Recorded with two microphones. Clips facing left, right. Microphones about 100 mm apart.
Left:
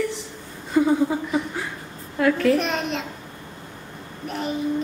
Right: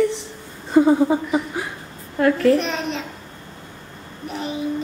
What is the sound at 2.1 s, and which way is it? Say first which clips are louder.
Speech: right 3 dB; centre (ahead or behind).